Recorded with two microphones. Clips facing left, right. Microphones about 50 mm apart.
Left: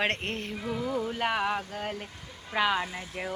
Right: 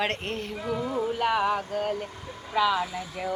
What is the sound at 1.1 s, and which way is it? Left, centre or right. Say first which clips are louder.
Music: right 5 dB; left.